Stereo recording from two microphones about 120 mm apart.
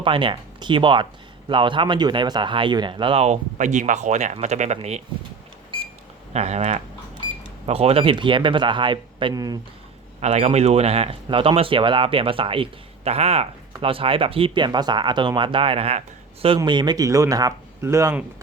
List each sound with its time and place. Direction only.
0.0 s speech: 45° right (ahead or behind)
3.6 s speech: 85° right; by 5.0 s 60° right (ahead or behind)
6.3 s speech: 65° right (ahead or behind)
7.7 s speech: 55° right (ahead or behind)
9.3 s speech: 30° right (ahead or behind)
10.2 s speech: 65° right (ahead or behind); by 12.6 s 45° right (ahead or behind)
13.1 s speech: 60° right (ahead or behind)
16.6 s speech: 40° right (ahead or behind); by 18.2 s 20° right (ahead or behind)